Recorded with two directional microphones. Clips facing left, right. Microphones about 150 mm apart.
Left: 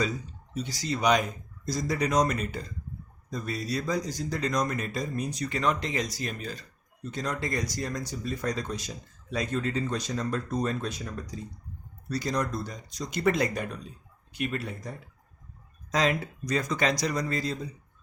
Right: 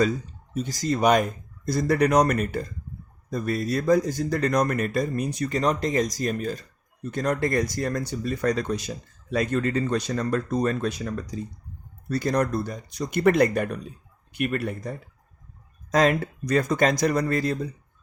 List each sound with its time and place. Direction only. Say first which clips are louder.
0.5 s speech: right 6 dB; 45° right (ahead or behind)
5.5 s speech: right 4 dB; 40° right (ahead or behind); by 10.9 s 65° right (ahead or behind)
12.0 s speech: right 6 dB; 55° right (ahead or behind)
15.9 s speech: right 6 dB; 50° right (ahead or behind)